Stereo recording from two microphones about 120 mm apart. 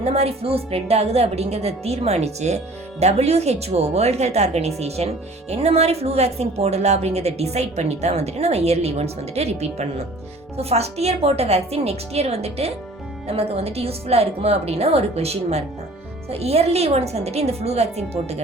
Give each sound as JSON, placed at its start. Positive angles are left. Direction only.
{"t": 0.0, "sound": "speech", "side_deg": -60}